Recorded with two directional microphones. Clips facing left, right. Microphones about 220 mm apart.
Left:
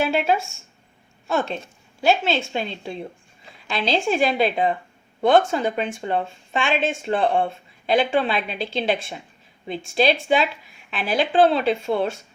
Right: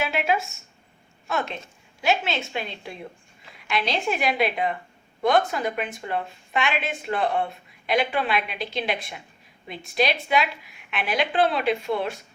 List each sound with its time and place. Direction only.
0.0 s a woman's voice: 30° left (ahead or behind)